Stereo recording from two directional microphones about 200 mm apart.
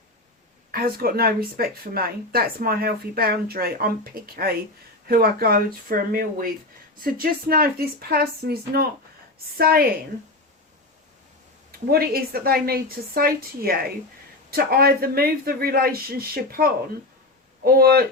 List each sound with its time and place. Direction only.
0.7 s speech: 50° right (ahead or behind)
11.9 s speech: 50° right (ahead or behind)
17.7 s speech: 50° right (ahead or behind)